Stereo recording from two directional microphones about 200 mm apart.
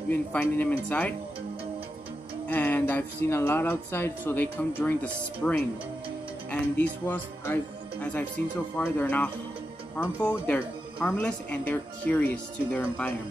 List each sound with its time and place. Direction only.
0.1 s speech: 10° left (ahead or behind)
2.4 s speech: 10° left (ahead or behind)